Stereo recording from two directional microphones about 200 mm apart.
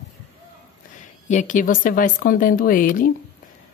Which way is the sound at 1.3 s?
40° left (ahead or behind).